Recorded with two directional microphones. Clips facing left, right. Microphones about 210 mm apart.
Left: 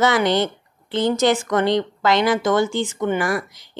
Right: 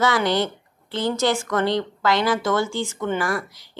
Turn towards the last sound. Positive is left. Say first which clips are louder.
# left 3 dB
turn(degrees=20)  # may be behind; listen again after turning